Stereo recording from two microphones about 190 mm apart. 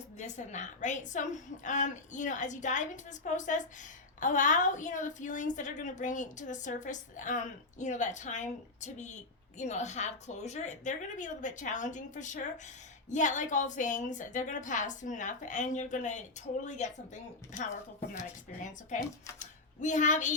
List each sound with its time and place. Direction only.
0.2 s a woman's voice: 40° left (ahead or behind)
18.2 s a woman's voice: 40° left (ahead or behind)